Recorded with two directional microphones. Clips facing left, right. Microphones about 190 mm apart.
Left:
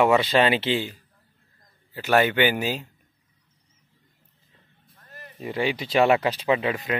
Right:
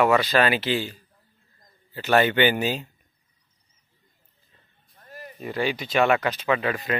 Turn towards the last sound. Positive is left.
turn(degrees=20)  # may be behind; listen again after turning